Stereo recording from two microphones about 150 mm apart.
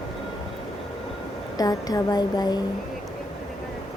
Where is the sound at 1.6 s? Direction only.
25° left (ahead or behind).